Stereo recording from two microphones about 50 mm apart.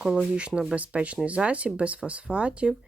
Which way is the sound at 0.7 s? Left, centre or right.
Right.